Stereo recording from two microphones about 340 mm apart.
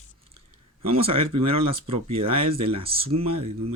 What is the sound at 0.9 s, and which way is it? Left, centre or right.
Speech, centre.